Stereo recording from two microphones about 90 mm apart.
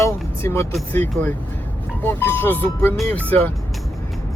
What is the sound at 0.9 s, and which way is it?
Speech, 25° left (ahead or behind).